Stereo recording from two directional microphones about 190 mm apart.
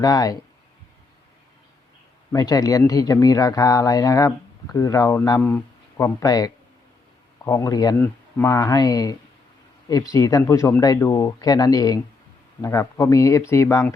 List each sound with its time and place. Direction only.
0.0 s speech: 20° left (ahead or behind)
2.3 s speech: 20° left (ahead or behind)